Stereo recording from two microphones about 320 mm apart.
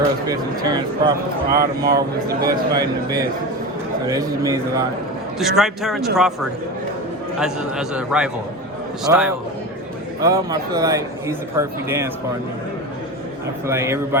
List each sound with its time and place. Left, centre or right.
0.3 s speech: centre
1.5 s speech: right
2.5 s a man's voice: centre
13.7 s speech: centre